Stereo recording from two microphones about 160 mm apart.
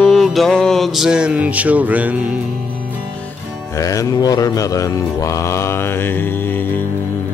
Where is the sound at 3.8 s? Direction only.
20° left (ahead or behind).